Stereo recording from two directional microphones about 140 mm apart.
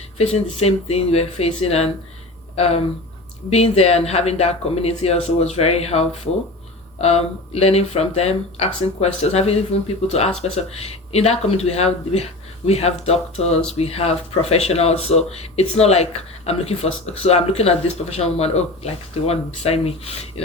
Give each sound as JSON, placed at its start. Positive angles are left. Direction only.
{"t": 0.2, "sound": "speech", "side_deg": 50}